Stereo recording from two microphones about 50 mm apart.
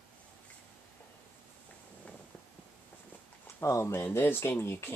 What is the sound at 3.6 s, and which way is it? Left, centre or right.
Speech, left.